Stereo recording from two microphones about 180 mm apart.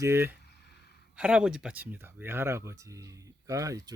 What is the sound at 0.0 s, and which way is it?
Speech, 15° right (ahead or behind).